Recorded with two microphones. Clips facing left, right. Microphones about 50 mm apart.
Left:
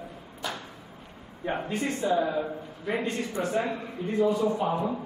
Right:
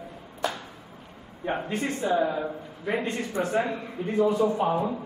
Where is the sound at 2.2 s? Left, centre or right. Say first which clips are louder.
Right 1 dB; centre.